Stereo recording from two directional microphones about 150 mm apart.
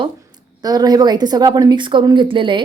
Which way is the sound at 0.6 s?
25° right (ahead or behind).